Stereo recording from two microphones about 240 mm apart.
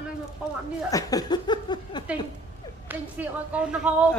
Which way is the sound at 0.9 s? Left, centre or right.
Centre.